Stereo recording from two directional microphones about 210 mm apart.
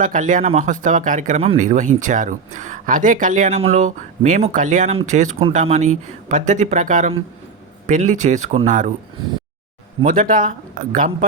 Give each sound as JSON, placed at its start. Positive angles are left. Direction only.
{"t": 0.0, "sound": "speech", "side_deg": -40}
{"t": 10.0, "sound": "speech", "side_deg": -40}